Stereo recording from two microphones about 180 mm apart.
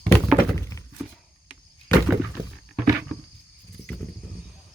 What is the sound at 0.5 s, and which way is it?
Thunk, 15° left (ahead or behind).